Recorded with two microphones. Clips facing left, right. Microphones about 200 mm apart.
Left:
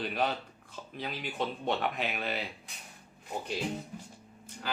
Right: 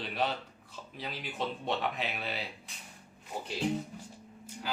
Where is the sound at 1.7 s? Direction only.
Centre (ahead or behind).